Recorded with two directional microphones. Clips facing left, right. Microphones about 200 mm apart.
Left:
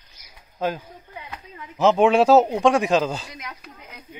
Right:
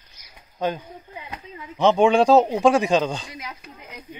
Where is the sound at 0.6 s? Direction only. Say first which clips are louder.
Even; 5° left (ahead or behind).